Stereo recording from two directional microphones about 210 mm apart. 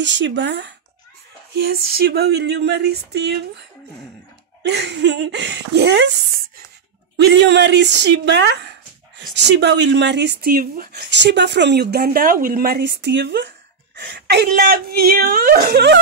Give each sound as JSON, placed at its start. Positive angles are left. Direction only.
{"t": 0.0, "sound": "speech", "side_deg": -60}
{"t": 1.7, "sound": "speech", "side_deg": -45}
{"t": 4.6, "sound": "speech", "side_deg": -55}
{"t": 7.2, "sound": "speech", "side_deg": -55}